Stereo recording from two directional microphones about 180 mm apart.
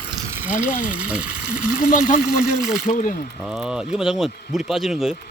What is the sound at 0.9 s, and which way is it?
Speech, 5° right (ahead or behind).